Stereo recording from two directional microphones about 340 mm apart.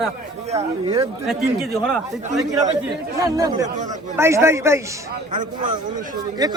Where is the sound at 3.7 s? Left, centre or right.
Right.